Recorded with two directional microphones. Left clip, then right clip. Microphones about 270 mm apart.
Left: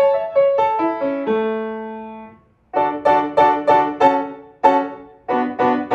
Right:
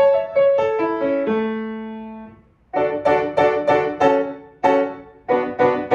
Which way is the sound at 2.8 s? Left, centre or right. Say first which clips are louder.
Left 2 dB; centre.